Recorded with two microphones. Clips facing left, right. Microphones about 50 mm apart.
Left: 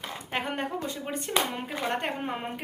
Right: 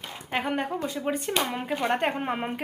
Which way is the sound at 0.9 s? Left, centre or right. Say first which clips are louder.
Right 6 dB; right.